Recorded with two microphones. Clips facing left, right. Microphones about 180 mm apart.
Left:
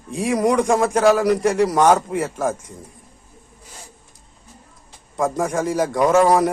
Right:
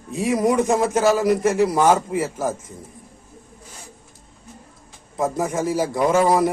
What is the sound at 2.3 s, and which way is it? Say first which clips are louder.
Speech: left 2 dB; 90° left.